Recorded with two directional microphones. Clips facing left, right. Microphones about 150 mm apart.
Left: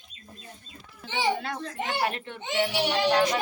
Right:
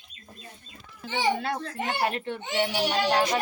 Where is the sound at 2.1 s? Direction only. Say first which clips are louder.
Right 2 dB; 35° right (ahead or behind).